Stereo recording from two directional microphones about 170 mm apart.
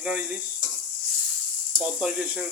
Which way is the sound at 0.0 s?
5° right (ahead or behind).